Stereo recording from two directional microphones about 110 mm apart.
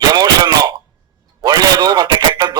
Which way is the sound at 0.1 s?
35° right (ahead or behind).